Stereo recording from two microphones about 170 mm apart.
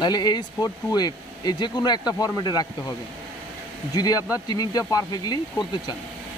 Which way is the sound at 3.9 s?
20° left (ahead or behind).